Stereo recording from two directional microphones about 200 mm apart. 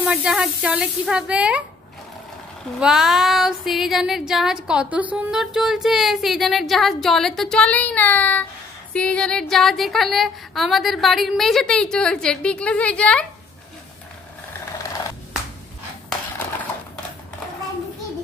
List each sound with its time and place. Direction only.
0.0 s female singing: 5° right (ahead or behind)
2.8 s female singing: 5° right (ahead or behind)